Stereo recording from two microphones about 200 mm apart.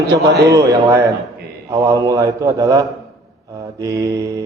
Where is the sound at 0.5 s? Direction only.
15° right (ahead or behind).